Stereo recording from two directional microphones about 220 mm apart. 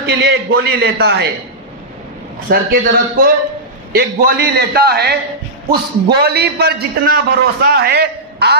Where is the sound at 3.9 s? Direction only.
40° right (ahead or behind).